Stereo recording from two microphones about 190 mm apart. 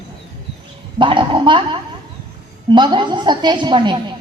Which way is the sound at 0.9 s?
25° right (ahead or behind).